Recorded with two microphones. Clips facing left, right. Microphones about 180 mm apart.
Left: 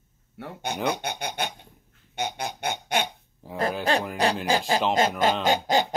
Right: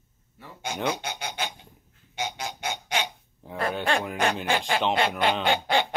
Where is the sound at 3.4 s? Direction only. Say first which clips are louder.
Left 1 dB; centre (ahead or behind).